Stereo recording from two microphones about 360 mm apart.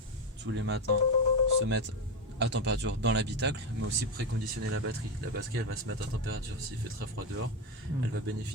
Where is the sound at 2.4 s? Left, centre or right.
Right.